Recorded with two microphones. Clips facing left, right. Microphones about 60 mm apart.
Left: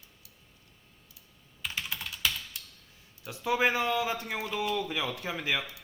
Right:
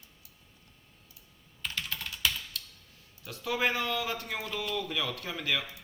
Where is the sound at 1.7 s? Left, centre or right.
Centre.